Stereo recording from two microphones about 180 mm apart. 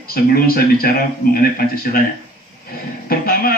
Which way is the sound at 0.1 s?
55° left (ahead or behind).